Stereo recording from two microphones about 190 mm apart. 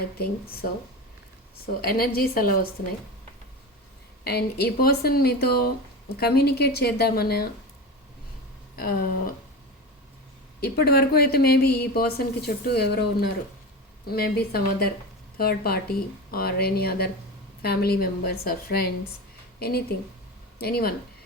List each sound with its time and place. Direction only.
0.0 s a woman's voice: 55° left (ahead or behind)
1.6 s a woman's voice: 50° left (ahead or behind)
4.2 s speech: 55° left (ahead or behind)
8.7 s speech: 50° left (ahead or behind)
10.6 s a woman's voice: 55° left (ahead or behind)